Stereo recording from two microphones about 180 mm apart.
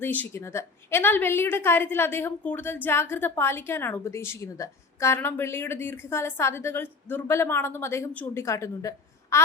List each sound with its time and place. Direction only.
0.0 s a woman's voice: 10° left (ahead or behind)